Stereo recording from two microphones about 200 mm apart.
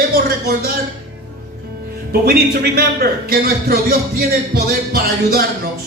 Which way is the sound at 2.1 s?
50° right (ahead or behind).